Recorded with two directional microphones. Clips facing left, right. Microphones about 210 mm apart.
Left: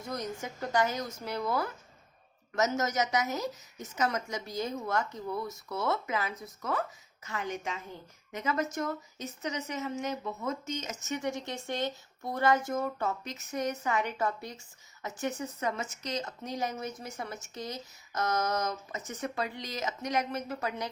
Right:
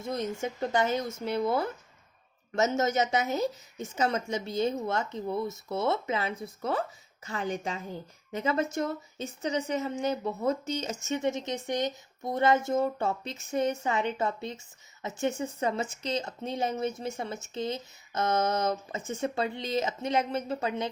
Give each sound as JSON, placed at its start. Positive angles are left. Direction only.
{"t": 0.0, "sound": "a woman's voice", "side_deg": -25}